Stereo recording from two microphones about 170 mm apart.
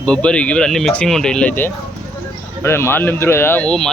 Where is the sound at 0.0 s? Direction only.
5° left (ahead or behind).